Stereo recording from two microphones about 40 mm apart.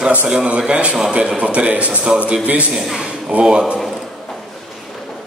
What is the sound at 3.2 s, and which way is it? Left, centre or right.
Speech, right.